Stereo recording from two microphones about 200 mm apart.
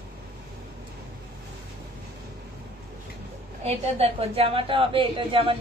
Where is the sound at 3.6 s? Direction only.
30° right (ahead or behind).